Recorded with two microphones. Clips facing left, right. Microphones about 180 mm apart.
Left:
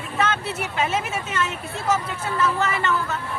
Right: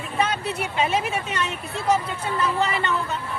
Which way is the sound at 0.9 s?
35° right (ahead or behind).